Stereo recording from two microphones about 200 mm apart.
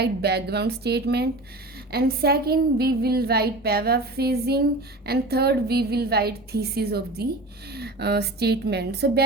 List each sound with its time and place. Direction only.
0.0 s a woman's voice: 55° right (ahead or behind)